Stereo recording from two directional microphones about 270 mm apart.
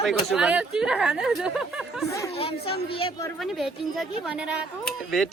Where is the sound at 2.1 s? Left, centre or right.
Centre.